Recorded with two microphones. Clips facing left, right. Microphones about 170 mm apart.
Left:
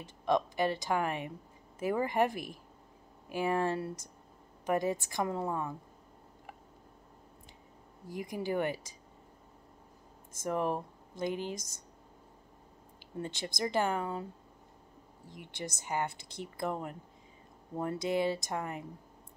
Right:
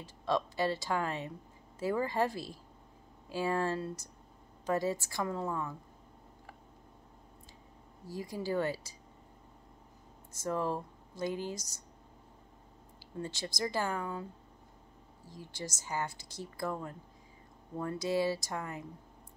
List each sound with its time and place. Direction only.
0.0 s speech: 20° left (ahead or behind)
8.1 s speech: 20° left (ahead or behind)
10.4 s speech: 20° left (ahead or behind)
13.2 s speech: 20° left (ahead or behind)
15.2 s speech: 20° left (ahead or behind)